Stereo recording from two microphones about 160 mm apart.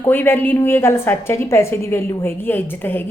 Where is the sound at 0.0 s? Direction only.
15° left (ahead or behind).